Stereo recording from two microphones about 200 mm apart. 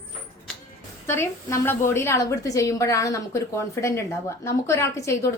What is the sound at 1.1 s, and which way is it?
A woman's voice, 15° left (ahead or behind).